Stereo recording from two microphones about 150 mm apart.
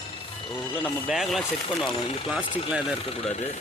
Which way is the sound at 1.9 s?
35° left (ahead or behind).